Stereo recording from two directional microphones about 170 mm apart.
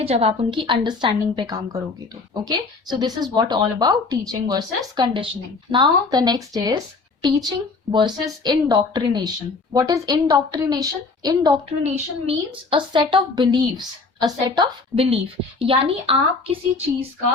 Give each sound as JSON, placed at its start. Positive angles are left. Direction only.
{"t": 0.0, "sound": "a woman's voice", "side_deg": -35}
{"t": 11.8, "sound": "a woman's voice", "side_deg": -40}